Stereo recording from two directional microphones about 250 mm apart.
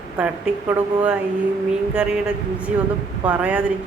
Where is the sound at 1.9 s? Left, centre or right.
Centre.